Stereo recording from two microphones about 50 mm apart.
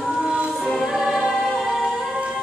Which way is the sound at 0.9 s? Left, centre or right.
Centre.